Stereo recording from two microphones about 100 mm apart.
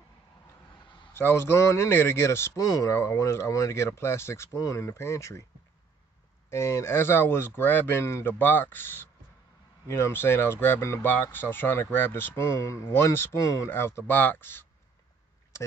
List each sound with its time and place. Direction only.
1.1 s speech: 25° left (ahead or behind)
2.6 s speech: 35° left (ahead or behind)
6.5 s speech: 25° left (ahead or behind)